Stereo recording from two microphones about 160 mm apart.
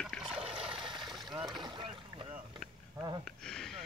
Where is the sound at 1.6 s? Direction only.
30° right (ahead or behind).